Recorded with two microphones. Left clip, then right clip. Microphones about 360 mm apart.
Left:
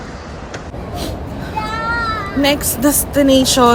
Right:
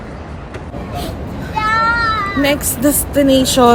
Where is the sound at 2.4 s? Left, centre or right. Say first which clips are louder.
Left 3 dB; centre.